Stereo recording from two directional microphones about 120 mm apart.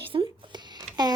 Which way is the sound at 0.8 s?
35° right (ahead or behind).